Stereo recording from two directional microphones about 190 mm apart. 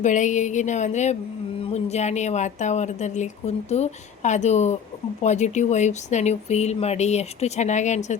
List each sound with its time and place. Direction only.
0.0 s a woman's voice: 40° left (ahead or behind)